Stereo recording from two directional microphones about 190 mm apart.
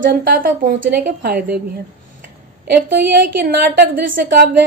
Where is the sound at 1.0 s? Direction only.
50° right (ahead or behind).